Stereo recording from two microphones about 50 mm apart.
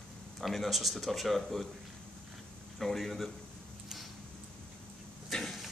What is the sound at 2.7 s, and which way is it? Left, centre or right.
Speech, centre.